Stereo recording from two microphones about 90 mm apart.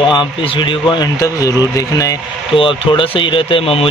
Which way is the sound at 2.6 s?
70° left (ahead or behind).